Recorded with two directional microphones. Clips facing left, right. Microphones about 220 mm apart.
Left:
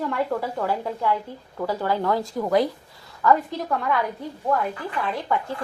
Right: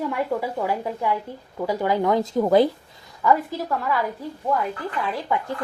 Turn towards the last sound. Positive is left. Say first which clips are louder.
# even
turn(degrees=-5)  # may be behind; listen again after turning